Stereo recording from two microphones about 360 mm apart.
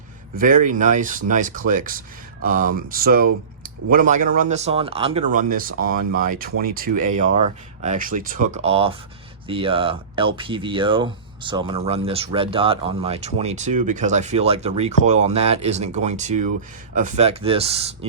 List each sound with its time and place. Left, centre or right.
0.3 s speech: right